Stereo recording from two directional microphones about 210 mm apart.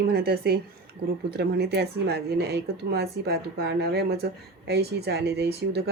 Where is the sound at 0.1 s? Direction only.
50° right (ahead or behind).